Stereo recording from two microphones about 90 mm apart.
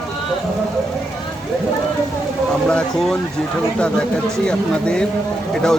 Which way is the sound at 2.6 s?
5° left (ahead or behind).